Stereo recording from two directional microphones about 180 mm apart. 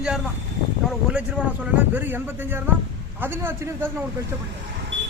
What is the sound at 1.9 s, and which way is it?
Speech, 10° right (ahead or behind).